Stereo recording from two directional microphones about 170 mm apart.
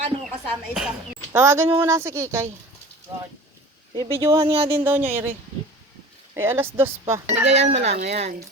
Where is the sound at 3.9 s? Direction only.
25° right (ahead or behind).